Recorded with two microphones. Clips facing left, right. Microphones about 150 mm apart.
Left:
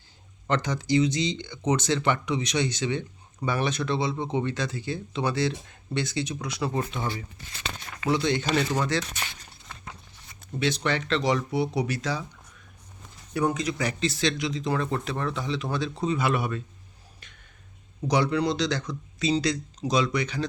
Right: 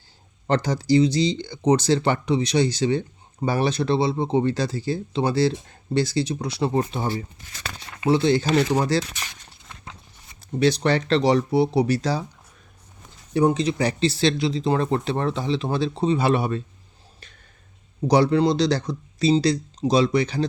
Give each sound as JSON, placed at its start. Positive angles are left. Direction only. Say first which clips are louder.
{"t": 0.4, "sound": "speech", "louder": "right 5 dB", "side_deg": -35}
{"t": 10.4, "sound": "speech", "louder": "right 7 dB", "side_deg": -35}
{"t": 13.3, "sound": "speech", "louder": "right 6 dB", "side_deg": -30}
{"t": 18.1, "sound": "speech", "louder": "right 6 dB", "side_deg": -35}